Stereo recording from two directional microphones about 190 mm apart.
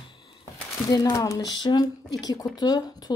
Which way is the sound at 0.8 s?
20° left (ahead or behind).